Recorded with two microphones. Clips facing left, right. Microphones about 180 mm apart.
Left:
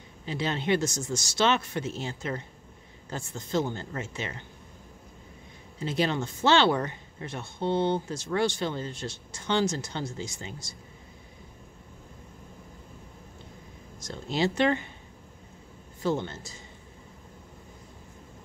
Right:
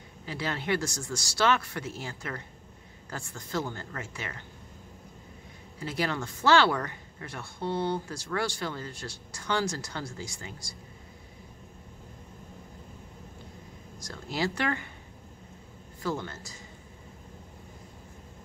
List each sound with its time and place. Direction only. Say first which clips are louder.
0.2 s speech: left 3 dB; 20° left (ahead or behind)
5.8 s speech: left 4 dB; 25° left (ahead or behind)
13.9 s speech: left 4 dB; 20° left (ahead or behind)
16.0 s speech: left 4 dB; 25° left (ahead or behind)